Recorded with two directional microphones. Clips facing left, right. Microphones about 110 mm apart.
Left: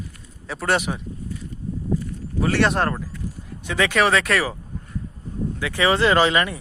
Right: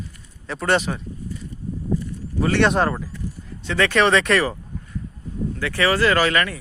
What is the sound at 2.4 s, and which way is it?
Speech, centre (ahead or behind).